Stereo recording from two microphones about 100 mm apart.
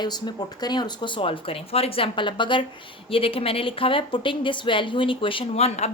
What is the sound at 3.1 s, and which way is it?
Speech, 65° left (ahead or behind).